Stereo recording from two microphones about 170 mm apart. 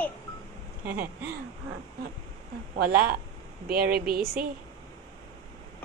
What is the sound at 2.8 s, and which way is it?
A woman's voice, 65° right (ahead or behind).